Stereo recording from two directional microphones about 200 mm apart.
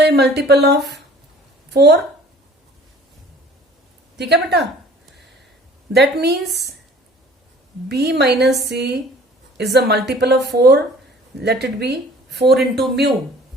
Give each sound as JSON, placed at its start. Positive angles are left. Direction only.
{"t": 0.0, "sound": "a woman's voice", "side_deg": -55}
{"t": 4.2, "sound": "a woman's voice", "side_deg": -55}
{"t": 5.9, "sound": "a woman's voice", "side_deg": -55}
{"t": 7.9, "sound": "a woman's voice", "side_deg": -55}